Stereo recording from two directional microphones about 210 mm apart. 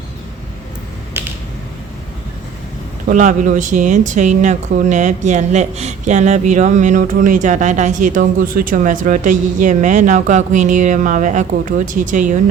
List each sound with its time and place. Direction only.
3.1 s speech: 35° right (ahead or behind)